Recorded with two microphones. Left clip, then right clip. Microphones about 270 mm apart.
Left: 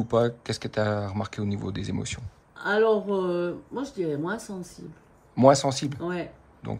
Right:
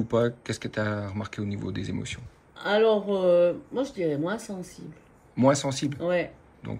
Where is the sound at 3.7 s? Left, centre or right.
Left.